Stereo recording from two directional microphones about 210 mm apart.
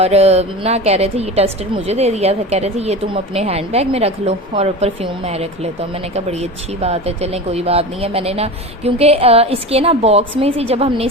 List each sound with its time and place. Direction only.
0.0 s a woman's voice: 30° right (ahead or behind)